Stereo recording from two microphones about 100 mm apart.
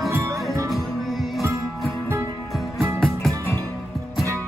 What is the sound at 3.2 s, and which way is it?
Music, 5° left (ahead or behind).